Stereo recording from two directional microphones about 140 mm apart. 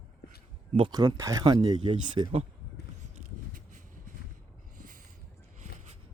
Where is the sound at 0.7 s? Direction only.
35° right (ahead or behind).